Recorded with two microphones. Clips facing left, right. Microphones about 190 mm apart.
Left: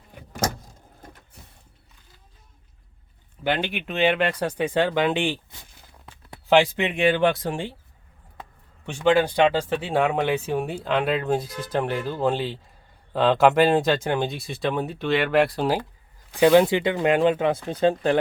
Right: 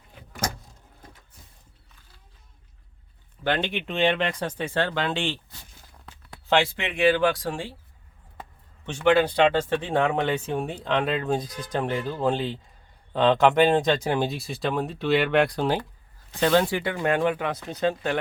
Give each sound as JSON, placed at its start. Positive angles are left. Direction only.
{"t": 1.4, "sound": "a sound", "side_deg": 65}
{"t": 3.4, "sound": "speech", "side_deg": 5}
{"t": 8.9, "sound": "speech", "side_deg": 15}